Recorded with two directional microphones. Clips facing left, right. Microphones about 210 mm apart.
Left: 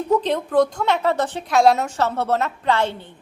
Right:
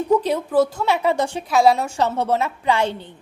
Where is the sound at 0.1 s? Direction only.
10° right (ahead or behind).